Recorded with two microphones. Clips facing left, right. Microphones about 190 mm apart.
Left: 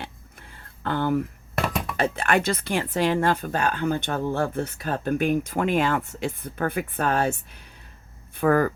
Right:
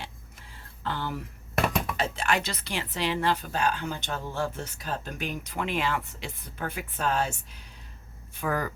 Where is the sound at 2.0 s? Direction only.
55° left (ahead or behind).